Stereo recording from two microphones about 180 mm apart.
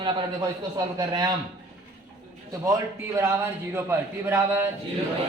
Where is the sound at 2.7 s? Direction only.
15° right (ahead or behind).